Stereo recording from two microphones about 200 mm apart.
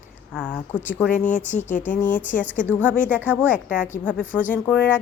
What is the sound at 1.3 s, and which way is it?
Speech, 40° left (ahead or behind).